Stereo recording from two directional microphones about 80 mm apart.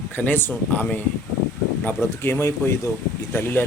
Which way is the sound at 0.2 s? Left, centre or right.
Left.